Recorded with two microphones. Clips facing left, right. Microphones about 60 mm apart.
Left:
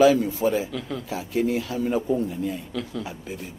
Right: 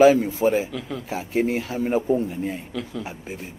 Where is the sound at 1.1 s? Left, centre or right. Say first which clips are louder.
Right 2 dB; right.